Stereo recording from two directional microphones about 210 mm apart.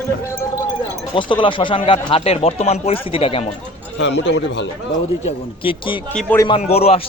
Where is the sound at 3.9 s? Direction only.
55° left (ahead or behind).